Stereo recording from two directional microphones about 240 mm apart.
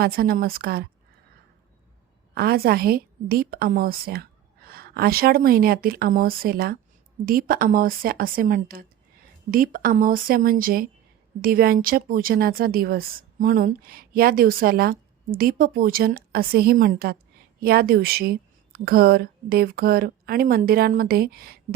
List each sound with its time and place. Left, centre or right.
0.0 s speech: right
2.3 s speech: right